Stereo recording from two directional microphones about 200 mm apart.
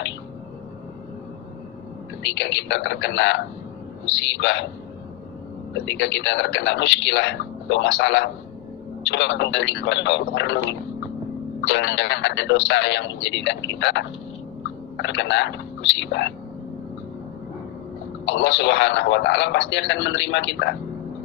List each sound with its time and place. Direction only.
2.2 s speech: 65° left (ahead or behind)
5.8 s speech: 65° left (ahead or behind)
18.3 s speech: 65° left (ahead or behind)